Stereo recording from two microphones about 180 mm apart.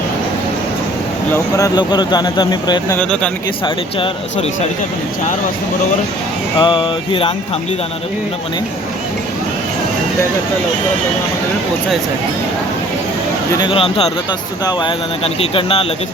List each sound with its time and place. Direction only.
1.5 s speech: 20° left (ahead or behind)
6.6 s speech: 25° left (ahead or behind)
13.6 s speech: 30° left (ahead or behind)